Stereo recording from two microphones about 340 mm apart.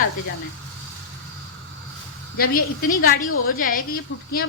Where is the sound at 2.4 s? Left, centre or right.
Left.